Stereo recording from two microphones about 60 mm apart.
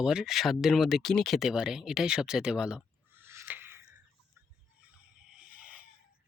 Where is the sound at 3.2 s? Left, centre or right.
Right.